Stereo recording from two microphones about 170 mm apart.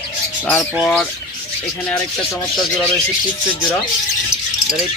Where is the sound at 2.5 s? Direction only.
Centre (ahead or behind).